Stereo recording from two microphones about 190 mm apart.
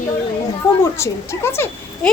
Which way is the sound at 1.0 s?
15° left (ahead or behind).